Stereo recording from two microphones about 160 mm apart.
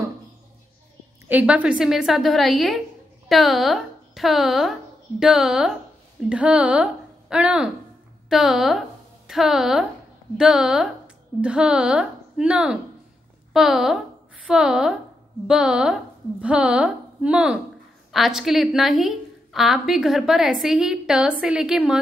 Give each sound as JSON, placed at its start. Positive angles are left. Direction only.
{"t": 1.2, "sound": "a woman's voice", "side_deg": -10}